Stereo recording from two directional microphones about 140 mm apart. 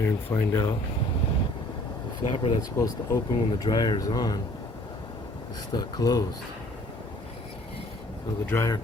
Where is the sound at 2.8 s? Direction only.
25° left (ahead or behind).